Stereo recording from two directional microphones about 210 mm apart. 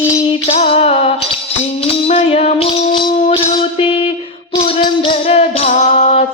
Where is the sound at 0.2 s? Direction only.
30° left (ahead or behind).